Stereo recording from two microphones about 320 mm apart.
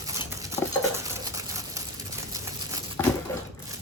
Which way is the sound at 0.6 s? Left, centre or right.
Centre.